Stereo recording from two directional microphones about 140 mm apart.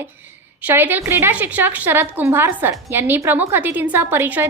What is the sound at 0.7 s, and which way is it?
A woman's voice, 15° right (ahead or behind).